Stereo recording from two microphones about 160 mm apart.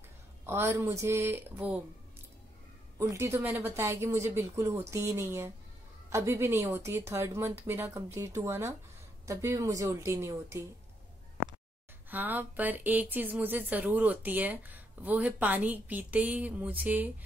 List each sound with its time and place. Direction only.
0.5 s speech: 15° right (ahead or behind)
3.0 s speech: 15° right (ahead or behind)
12.1 s speech: 10° right (ahead or behind)